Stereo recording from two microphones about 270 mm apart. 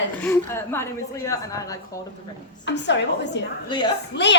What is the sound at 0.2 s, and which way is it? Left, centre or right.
A woman's voice, centre.